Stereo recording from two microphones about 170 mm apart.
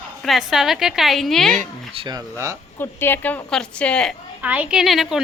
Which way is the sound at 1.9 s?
25° right (ahead or behind).